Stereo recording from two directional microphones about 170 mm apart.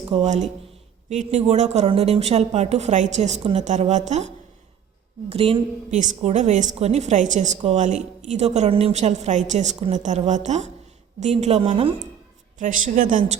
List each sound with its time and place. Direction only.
0.1 s speech: 40° right (ahead or behind)
5.3 s a woman's voice: 35° right (ahead or behind)
12.5 s a woman's voice: 45° right (ahead or behind)